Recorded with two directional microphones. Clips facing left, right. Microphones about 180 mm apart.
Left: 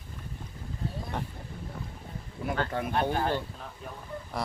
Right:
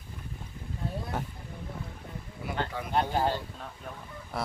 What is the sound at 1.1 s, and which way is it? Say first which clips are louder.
Speech: even; 5° right (ahead or behind).